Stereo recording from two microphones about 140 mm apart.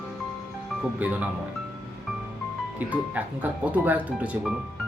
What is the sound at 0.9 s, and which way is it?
Speech, 10° right (ahead or behind).